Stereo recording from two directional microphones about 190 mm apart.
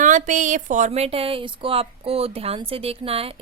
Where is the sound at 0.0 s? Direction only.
40° right (ahead or behind).